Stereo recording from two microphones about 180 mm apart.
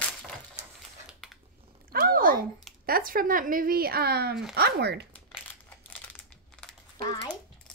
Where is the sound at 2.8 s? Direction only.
55° right (ahead or behind).